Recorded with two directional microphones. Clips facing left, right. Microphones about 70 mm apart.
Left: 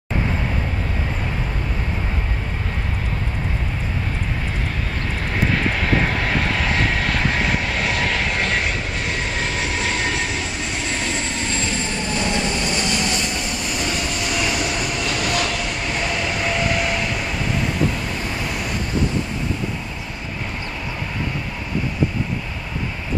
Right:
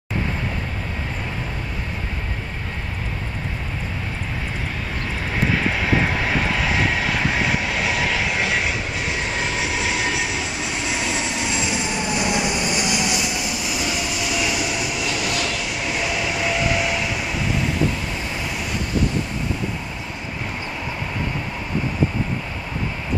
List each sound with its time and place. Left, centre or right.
5.3 s vehicle: centre